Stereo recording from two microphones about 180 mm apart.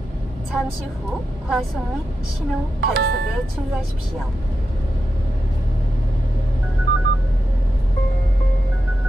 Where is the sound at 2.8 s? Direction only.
65° right (ahead or behind).